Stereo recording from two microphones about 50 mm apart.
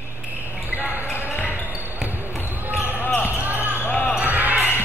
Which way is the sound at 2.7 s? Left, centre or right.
Right.